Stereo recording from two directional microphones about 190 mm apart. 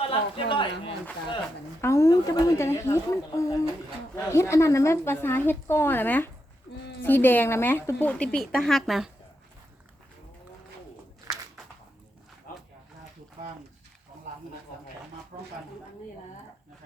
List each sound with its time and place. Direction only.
0.0 s speech: 30° left (ahead or behind)
1.8 s a woman's voice: 15° left (ahead or behind)
11.3 s a sound: 20° right (ahead or behind)